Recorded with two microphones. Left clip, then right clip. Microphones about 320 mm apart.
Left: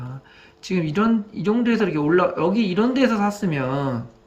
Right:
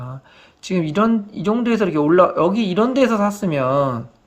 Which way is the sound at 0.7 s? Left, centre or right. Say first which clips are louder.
Right 3 dB; centre.